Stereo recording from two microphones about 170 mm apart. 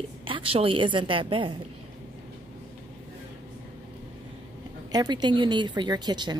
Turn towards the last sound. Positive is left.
turn(degrees=-25)  # may be behind; listen again after turning